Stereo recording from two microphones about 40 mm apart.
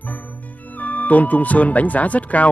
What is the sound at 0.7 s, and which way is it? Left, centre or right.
Speech, left.